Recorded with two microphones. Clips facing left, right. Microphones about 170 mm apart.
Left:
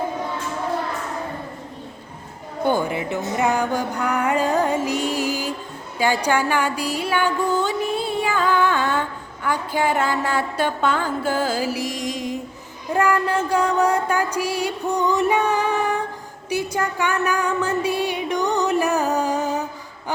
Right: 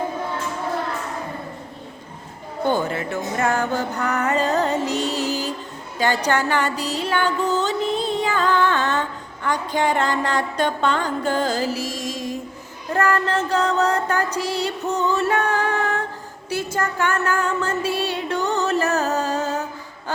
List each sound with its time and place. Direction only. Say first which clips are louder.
2.6 s speech: left 1 dB; 15° left (ahead or behind)
3.3 s music: left 1 dB; 15° left (ahead or behind)
16.5 s a sound: left 1 dB; 15° left (ahead or behind)